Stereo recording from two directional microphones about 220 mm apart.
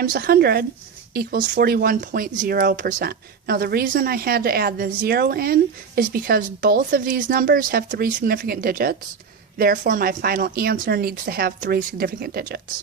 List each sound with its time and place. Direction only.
0.0 s speech: 40° right (ahead or behind)